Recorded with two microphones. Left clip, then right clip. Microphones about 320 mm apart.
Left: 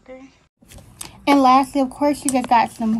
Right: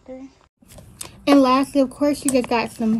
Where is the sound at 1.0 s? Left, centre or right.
Centre.